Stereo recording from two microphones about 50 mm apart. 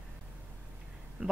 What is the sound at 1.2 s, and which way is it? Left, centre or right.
Speech, right.